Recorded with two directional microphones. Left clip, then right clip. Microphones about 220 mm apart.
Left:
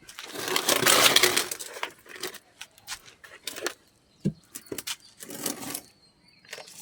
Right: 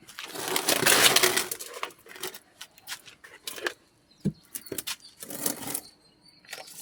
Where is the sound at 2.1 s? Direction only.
15° left (ahead or behind).